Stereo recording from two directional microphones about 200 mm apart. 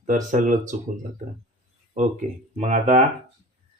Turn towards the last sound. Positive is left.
turn(degrees=-35)  # may be behind; listen again after turning